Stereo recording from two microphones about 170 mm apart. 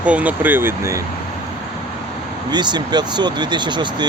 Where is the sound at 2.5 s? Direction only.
25° right (ahead or behind).